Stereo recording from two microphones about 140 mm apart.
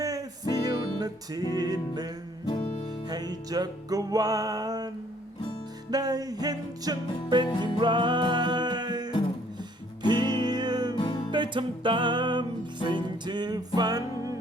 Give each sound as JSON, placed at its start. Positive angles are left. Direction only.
{"t": 0.0, "sound": "music", "side_deg": -25}
{"t": 2.5, "sound": "music", "side_deg": 45}
{"t": 3.1, "sound": "music", "side_deg": -30}
{"t": 5.9, "sound": "music", "side_deg": -30}
{"t": 10.9, "sound": "music", "side_deg": 35}
{"t": 11.3, "sound": "music", "side_deg": -35}